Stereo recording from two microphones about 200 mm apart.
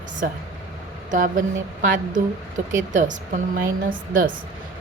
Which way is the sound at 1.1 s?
40° right (ahead or behind).